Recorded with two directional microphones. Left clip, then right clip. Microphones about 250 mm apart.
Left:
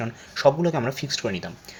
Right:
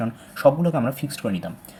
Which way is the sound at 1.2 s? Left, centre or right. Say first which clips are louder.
Even; left.